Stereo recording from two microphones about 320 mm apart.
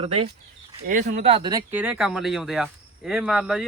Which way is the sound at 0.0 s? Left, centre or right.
Centre.